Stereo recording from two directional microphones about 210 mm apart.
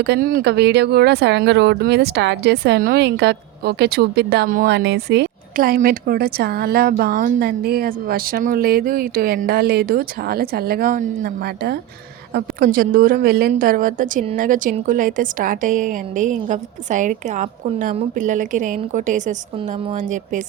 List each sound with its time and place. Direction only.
0.0 s a woman's voice: 50° right (ahead or behind)